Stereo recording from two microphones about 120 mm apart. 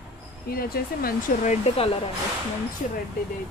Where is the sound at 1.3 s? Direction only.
90° left.